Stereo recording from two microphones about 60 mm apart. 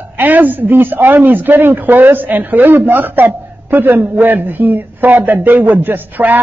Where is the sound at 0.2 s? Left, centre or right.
Right.